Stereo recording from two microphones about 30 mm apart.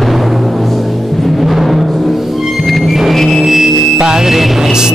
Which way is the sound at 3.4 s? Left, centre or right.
Centre.